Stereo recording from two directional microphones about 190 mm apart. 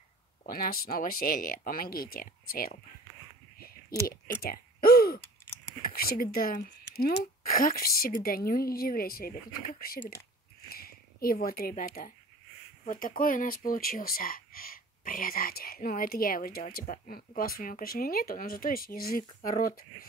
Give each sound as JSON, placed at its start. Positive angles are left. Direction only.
{"t": 0.4, "sound": "speech", "side_deg": 50}
{"t": 3.5, "sound": "a sound", "side_deg": 50}
{"t": 5.8, "sound": "speech", "side_deg": 50}